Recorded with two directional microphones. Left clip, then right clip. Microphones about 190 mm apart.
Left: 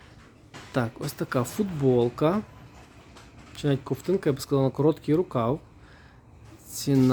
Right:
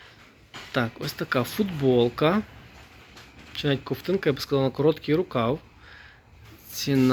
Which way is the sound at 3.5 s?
20° left (ahead or behind).